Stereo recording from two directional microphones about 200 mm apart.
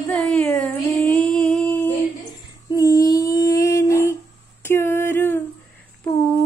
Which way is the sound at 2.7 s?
15° left (ahead or behind).